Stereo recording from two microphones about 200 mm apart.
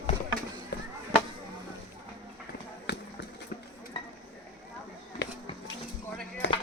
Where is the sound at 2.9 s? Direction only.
55° left (ahead or behind).